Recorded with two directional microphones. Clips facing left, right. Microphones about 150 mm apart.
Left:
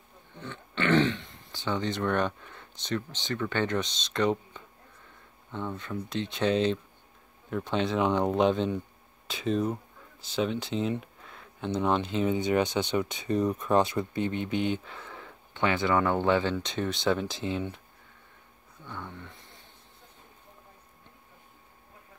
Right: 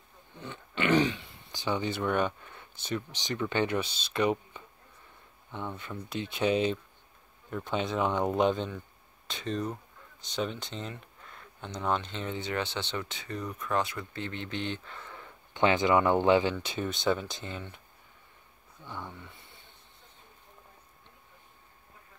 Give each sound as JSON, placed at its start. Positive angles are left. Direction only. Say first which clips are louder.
{"t": 0.4, "sound": "speech", "louder": "left 1 dB", "side_deg": -15}
{"t": 5.8, "sound": "speech", "louder": "left 4 dB", "side_deg": -5}
{"t": 15.5, "sound": "speech", "louder": "right 2 dB", "side_deg": -20}
{"t": 16.6, "sound": "speech", "louder": "left 1 dB", "side_deg": -5}
{"t": 18.9, "sound": "snoring", "louder": "left 1 dB", "side_deg": -5}